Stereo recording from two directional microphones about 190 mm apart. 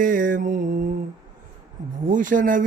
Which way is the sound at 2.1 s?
45° right (ahead or behind).